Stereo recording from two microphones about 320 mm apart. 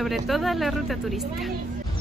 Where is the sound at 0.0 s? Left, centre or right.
Centre.